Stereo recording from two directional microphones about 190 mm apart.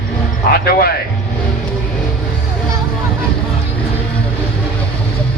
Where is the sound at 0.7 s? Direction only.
55° left (ahead or behind).